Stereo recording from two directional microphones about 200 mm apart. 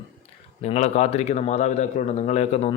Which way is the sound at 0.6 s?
35° left (ahead or behind).